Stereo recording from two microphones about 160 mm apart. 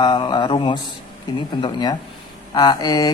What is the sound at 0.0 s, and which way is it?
A woman's voice, 25° left (ahead or behind).